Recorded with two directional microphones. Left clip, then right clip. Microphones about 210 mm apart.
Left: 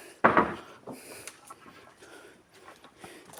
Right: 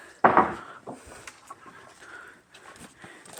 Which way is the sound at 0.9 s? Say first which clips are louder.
Right 1 dB; 40° left (ahead or behind).